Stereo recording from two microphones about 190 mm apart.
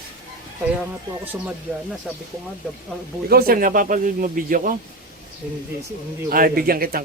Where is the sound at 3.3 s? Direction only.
50° right (ahead or behind).